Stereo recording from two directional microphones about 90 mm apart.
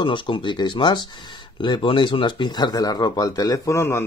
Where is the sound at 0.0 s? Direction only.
65° left (ahead or behind); by 3.8 s 40° left (ahead or behind).